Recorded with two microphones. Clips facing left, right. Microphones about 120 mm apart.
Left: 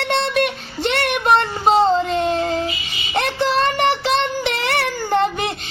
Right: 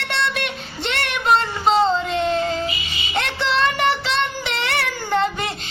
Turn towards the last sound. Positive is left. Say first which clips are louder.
# left 2 dB
turn(degrees=50)  # may be behind; listen again after turning